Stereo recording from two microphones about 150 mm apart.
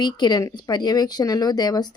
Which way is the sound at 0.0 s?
30° left (ahead or behind).